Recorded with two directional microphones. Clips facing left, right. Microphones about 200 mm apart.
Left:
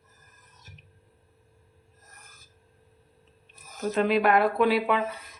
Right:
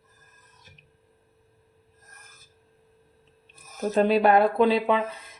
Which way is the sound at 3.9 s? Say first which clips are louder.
Right 3 dB; 35° right (ahead or behind).